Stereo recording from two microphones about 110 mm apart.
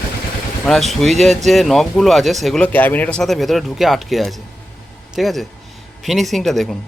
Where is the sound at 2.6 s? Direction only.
15° left (ahead or behind).